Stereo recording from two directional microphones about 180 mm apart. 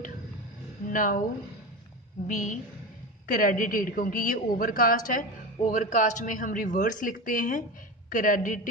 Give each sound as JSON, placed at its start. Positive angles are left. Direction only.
{"t": 0.9, "sound": "a woman's voice", "side_deg": 50}
{"t": 2.2, "sound": "a woman's voice", "side_deg": 45}